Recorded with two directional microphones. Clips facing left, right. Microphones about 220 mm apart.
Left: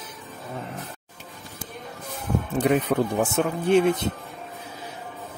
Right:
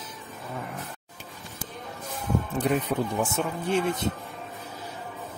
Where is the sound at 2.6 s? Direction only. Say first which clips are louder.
Left 6 dB; 65° left (ahead or behind).